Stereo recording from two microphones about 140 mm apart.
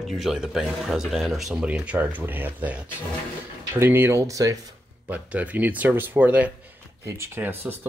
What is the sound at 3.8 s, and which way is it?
Speech, 15° right (ahead or behind).